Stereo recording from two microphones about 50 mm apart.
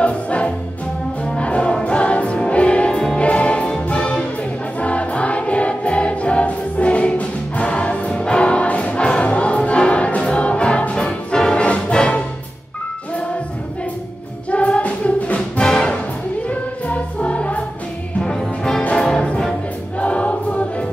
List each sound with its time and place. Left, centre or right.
0.0 s music: left
14.5 s music: left
15.6 s music: centre
16.4 s music: left
18.2 s music: centre
20.0 s choir: left